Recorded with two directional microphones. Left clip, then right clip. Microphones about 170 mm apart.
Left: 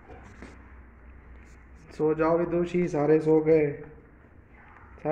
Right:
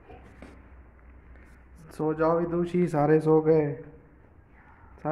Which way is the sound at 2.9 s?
50° right (ahead or behind).